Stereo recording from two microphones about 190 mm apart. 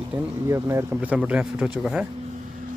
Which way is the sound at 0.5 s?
15° right (ahead or behind).